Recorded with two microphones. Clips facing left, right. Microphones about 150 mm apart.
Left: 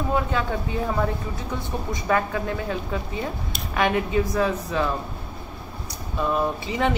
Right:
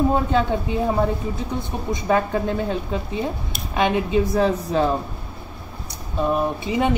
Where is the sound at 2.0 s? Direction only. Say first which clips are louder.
Right 3 dB; 25° right (ahead or behind).